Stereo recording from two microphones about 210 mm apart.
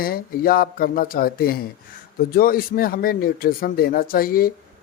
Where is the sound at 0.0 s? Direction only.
45° left (ahead or behind).